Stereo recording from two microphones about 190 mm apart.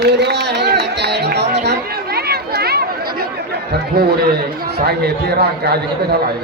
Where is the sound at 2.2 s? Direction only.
55° right (ahead or behind).